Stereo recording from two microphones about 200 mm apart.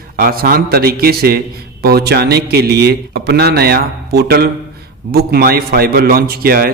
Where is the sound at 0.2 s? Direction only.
50° right (ahead or behind).